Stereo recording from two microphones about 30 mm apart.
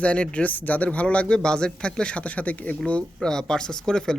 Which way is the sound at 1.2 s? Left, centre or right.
Left.